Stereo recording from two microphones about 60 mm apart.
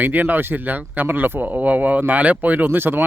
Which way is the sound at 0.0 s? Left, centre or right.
Right.